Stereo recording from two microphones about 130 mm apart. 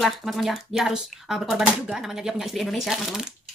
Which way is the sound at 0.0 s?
Centre (ahead or behind).